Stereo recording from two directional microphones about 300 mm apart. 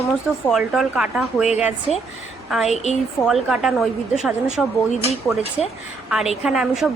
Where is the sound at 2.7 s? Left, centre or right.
Left.